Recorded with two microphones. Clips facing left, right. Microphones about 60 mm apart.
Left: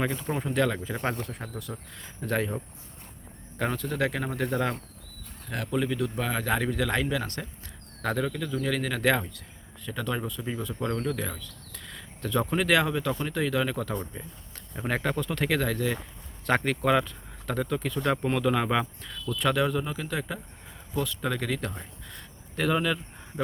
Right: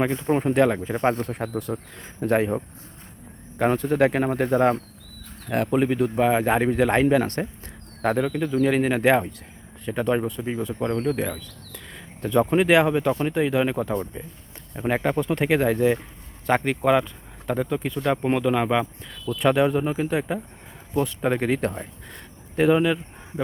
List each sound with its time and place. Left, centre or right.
0.3 s speech: right
0.5 s speech: right
3.7 s speech: right
6.1 s speech: right
16.5 s speech: centre